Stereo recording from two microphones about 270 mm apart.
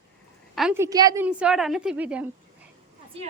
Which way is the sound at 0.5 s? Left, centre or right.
Centre.